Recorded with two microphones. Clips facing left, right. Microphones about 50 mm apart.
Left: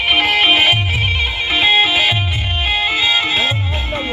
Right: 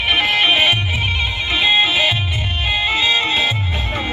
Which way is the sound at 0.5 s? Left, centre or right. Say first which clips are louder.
Left 2 dB; centre.